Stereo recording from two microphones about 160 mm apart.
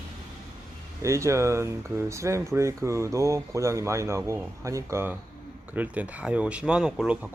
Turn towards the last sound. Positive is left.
turn(degrees=-5)  # may be behind; listen again after turning